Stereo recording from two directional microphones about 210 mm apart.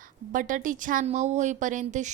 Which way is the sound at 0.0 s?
40° right (ahead or behind).